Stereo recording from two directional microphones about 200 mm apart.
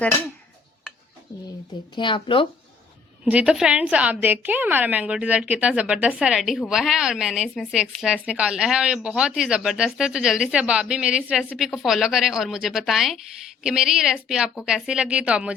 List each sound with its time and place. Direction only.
2.0 s speech: 25° left (ahead or behind)
3.2 s a woman's voice: 5° right (ahead or behind)